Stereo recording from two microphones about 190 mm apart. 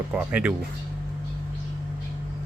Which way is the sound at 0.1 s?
5° right (ahead or behind).